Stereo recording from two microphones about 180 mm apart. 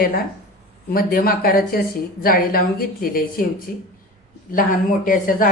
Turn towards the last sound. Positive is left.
turn(degrees=50)  # may be behind; listen again after turning